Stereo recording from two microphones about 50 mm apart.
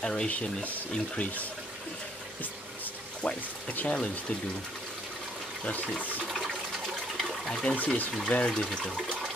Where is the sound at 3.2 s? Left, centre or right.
Left.